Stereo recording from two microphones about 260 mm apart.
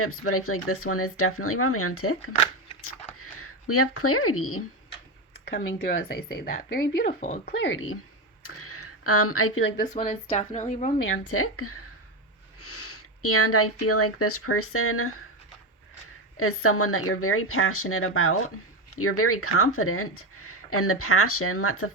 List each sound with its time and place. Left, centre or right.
0.0 s speech: left
5.5 s speech: left
7.6 s speech: left
8.4 s a sound: left
9.9 s speech: left
11.3 s speech: left
16.4 s speech: left